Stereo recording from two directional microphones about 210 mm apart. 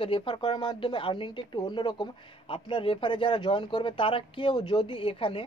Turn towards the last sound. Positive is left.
turn(degrees=25)  # may be behind; listen again after turning